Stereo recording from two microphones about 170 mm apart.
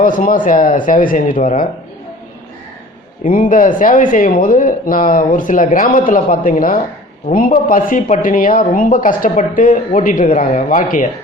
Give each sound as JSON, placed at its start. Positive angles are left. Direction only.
{"t": 0.0, "sound": "speech", "side_deg": 50}
{"t": 3.2, "sound": "speech", "side_deg": 50}